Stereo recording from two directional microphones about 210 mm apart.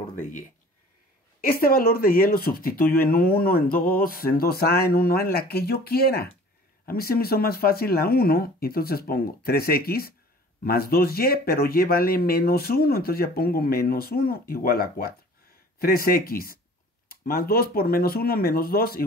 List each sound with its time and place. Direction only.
1.4 s speech: 45° left (ahead or behind)